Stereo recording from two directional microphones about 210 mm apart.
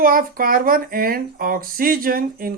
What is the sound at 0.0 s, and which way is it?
Speech, 45° right (ahead or behind).